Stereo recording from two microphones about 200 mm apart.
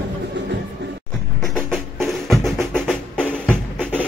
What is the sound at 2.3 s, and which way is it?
Drum, centre (ahead or behind).